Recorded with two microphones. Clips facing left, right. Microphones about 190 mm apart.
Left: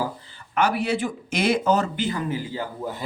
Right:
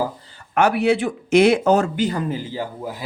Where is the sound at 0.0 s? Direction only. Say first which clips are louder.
Right 4 dB; 40° right (ahead or behind); by 1.8 s 65° right (ahead or behind).